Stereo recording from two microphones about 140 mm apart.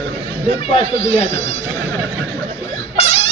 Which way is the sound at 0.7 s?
45° left (ahead or behind).